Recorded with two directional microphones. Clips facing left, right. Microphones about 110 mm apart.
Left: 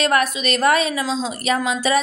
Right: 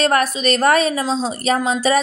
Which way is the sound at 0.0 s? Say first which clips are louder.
Right 2 dB; 35° right (ahead or behind).